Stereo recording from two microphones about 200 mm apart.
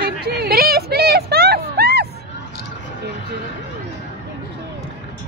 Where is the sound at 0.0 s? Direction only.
55° right (ahead or behind).